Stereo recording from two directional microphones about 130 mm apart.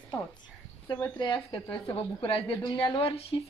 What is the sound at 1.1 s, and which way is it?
A woman's voice, 40° left (ahead or behind).